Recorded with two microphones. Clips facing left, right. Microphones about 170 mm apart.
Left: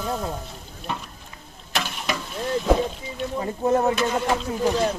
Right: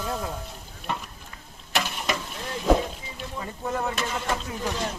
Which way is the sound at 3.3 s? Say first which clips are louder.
Left 9 dB; 40° left (ahead or behind).